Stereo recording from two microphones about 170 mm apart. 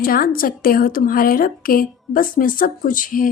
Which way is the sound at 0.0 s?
60° left (ahead or behind).